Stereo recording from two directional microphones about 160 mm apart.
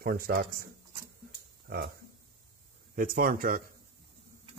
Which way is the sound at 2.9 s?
60° right (ahead or behind).